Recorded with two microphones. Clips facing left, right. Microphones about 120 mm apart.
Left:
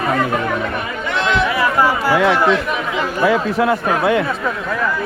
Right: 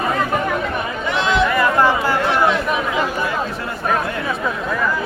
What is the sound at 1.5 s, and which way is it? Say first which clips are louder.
Chatter: even; 10° left (ahead or behind).